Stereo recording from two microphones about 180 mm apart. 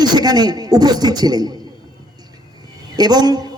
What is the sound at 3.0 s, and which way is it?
Speech, 20° right (ahead or behind).